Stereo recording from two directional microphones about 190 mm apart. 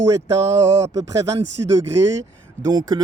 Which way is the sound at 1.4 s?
70° right (ahead or behind).